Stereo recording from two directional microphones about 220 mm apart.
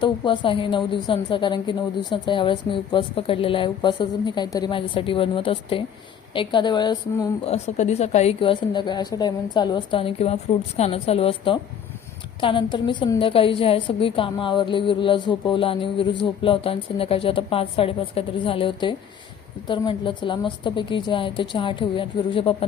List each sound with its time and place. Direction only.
0.0 s a woman's voice: 25° left (ahead or behind)